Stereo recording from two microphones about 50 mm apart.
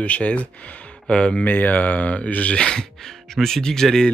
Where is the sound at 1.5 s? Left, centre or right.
Left.